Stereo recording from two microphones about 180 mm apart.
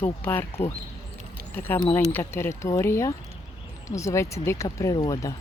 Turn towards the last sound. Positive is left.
turn(degrees=20)  # may be behind; listen again after turning